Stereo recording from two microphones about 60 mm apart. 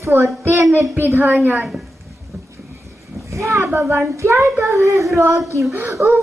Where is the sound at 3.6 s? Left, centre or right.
Right.